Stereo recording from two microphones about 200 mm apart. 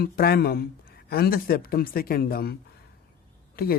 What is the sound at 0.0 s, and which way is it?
Speech, 50° left (ahead or behind).